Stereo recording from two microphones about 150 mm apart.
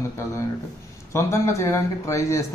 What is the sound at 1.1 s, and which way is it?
Speech, 20° left (ahead or behind).